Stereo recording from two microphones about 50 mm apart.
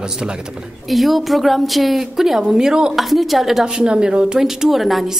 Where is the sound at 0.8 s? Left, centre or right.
Centre.